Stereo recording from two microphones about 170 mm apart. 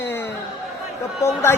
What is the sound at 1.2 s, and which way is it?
Speech, 15° left (ahead or behind).